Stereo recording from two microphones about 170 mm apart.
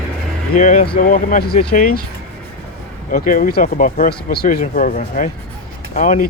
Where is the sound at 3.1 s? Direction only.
55° left (ahead or behind).